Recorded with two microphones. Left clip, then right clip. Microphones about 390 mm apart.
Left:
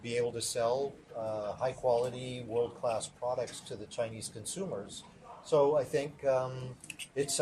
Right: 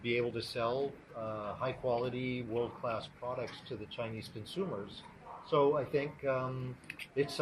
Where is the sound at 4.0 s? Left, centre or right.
Left.